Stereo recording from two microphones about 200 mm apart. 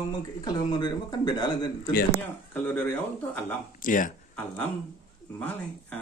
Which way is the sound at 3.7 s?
45° left (ahead or behind).